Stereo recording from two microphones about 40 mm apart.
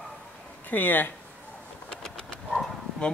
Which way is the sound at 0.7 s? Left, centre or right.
Left.